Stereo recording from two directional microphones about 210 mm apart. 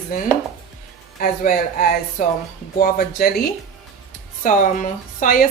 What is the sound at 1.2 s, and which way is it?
A woman's voice, 40° left (ahead or behind).